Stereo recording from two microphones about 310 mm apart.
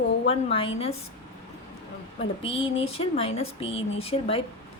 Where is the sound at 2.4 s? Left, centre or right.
Centre.